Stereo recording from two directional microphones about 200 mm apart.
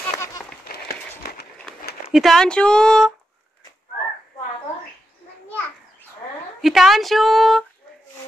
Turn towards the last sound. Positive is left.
turn(degrees=0)  # may be behind; listen again after turning